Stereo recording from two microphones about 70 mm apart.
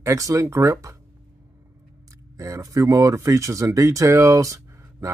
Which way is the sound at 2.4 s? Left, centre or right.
Right.